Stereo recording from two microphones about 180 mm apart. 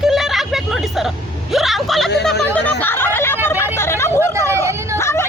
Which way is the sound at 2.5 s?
10° left (ahead or behind).